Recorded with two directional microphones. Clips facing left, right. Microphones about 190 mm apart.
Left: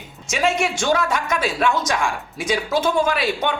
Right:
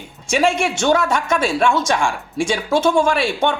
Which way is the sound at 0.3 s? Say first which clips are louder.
Right 3 dB; 30° right (ahead or behind).